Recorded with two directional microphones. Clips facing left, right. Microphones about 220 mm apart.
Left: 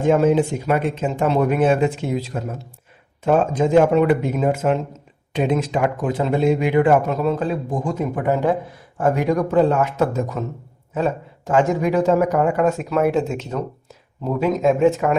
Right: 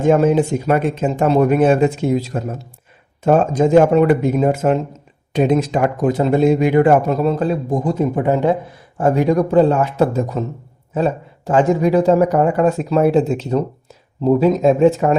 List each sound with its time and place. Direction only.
0.0 s speech: 45° right (ahead or behind)